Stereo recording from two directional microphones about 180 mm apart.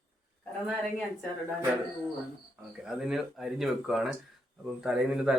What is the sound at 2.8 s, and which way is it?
Speech, 5° right (ahead or behind).